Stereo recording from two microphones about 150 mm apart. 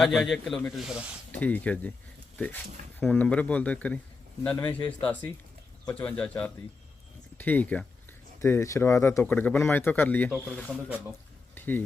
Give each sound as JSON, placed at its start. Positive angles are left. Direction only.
{"t": 0.0, "sound": "a man's voice", "side_deg": 0}
{"t": 1.3, "sound": "speech", "side_deg": 10}
{"t": 3.0, "sound": "a man's voice", "side_deg": 10}
{"t": 10.8, "sound": "a man's voice", "side_deg": -10}
{"t": 11.5, "sound": "a sound", "side_deg": 10}